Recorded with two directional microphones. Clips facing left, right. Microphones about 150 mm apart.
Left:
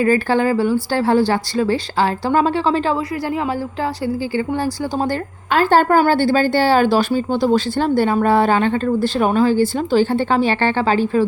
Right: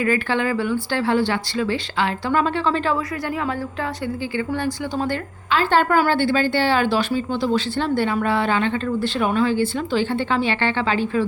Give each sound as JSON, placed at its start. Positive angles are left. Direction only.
{"t": 0.0, "sound": "a woman's voice", "side_deg": 35}
{"t": 4.0, "sound": "a woman's voice", "side_deg": 35}